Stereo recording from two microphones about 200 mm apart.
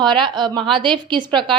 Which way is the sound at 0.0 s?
20° right (ahead or behind).